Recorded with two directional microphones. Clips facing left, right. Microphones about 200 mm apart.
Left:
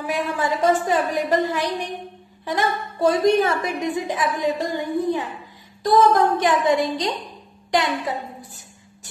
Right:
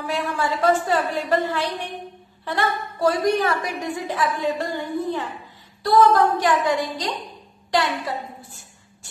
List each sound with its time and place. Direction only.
0.0 s a woman's voice: 15° left (ahead or behind)